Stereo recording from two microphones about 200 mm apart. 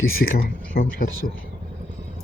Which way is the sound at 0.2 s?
50° left (ahead or behind).